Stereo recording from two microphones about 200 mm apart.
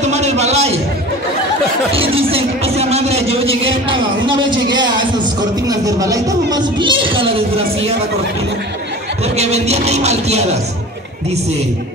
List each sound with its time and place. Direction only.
0.0 s a sound: 35° right (ahead or behind)
2.0 s a man's voice: 30° right (ahead or behind)
9.4 s music: 30° right (ahead or behind)